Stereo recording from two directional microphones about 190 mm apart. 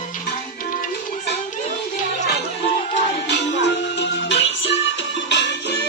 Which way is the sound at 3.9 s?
65° left (ahead or behind).